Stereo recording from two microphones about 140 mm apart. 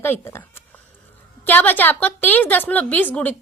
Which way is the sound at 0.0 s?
15° left (ahead or behind).